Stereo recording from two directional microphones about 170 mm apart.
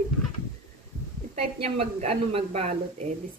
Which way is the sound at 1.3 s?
40° right (ahead or behind).